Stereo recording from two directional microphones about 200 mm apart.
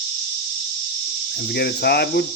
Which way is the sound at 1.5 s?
55° left (ahead or behind).